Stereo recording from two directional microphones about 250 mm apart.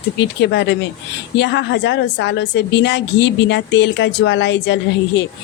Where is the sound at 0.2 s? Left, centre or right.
Left.